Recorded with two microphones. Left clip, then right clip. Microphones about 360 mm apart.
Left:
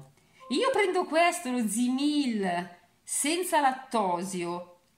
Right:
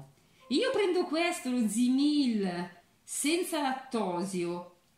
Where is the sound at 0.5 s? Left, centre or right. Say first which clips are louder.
Left 2 dB; centre.